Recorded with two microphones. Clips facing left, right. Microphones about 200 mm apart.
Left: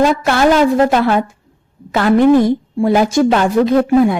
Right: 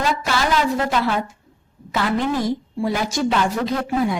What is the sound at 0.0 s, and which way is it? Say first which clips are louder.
A woman's voice: left 9 dB; 55° left (ahead or behind).